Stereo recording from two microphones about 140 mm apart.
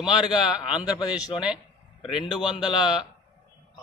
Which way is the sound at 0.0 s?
5° right (ahead or behind).